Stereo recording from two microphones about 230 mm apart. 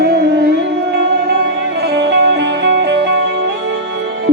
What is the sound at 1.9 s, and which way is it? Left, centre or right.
Music, right.